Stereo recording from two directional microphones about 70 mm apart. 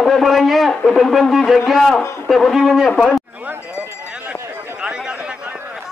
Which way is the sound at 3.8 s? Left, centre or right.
Right.